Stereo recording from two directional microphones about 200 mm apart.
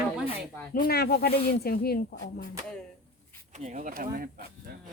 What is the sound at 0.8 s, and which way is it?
Speech, 50° left (ahead or behind).